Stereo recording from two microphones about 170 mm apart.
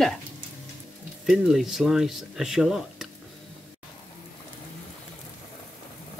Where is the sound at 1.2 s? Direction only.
Centre (ahead or behind).